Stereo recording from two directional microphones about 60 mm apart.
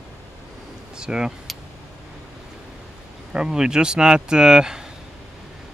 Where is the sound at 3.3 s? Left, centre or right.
Centre.